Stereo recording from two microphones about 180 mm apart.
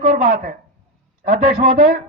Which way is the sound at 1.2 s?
50° right (ahead or behind).